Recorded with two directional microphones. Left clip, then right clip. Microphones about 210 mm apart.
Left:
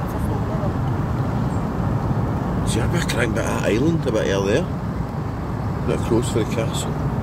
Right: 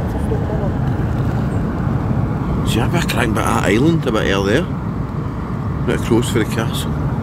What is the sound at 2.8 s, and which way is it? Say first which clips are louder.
Speech: right 4 dB; 15° right (ahead or behind).